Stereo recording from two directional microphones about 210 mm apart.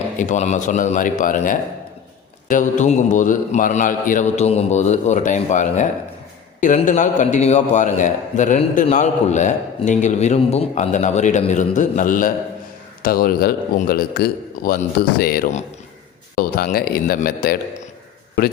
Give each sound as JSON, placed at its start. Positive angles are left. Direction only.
{"t": 0.2, "sound": "a man's voice", "side_deg": 35}